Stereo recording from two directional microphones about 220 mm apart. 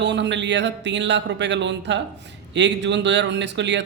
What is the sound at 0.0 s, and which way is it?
Speech, 55° right (ahead or behind).